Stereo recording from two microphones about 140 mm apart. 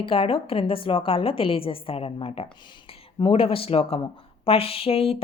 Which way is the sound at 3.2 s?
40° left (ahead or behind).